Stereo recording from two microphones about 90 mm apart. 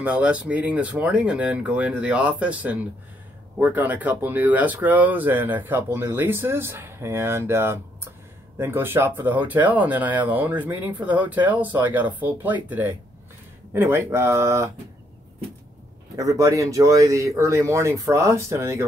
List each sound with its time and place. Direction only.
0.0 s speech: 15° right (ahead or behind); by 14.7 s 35° right (ahead or behind)
16.2 s speech: 40° right (ahead or behind)